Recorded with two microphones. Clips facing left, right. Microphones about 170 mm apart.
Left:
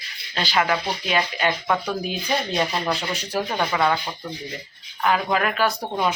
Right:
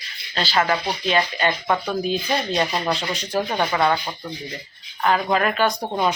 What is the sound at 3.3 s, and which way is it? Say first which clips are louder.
Speech: right 2 dB; 15° right (ahead or behind).